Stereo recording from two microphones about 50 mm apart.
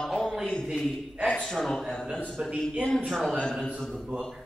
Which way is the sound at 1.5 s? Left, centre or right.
Centre.